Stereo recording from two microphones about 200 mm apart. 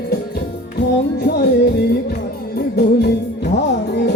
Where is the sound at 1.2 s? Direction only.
55° left (ahead or behind).